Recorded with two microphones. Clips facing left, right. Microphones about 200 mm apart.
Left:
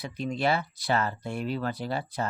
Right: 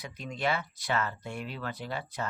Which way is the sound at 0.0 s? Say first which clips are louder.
Left 5 dB; 30° left (ahead or behind).